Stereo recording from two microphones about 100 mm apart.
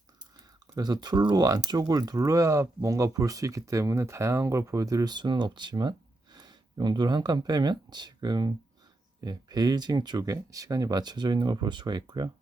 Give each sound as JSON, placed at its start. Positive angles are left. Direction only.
{"t": 0.7, "sound": "speech", "side_deg": -40}